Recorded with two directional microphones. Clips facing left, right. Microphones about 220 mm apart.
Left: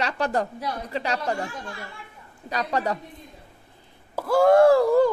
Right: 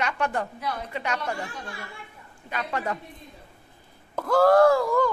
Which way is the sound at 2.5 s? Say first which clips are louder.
Left 4 dB; 40° left (ahead or behind).